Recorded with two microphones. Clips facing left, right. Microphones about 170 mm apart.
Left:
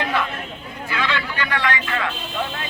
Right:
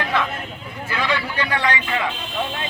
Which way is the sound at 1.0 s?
20° right (ahead or behind).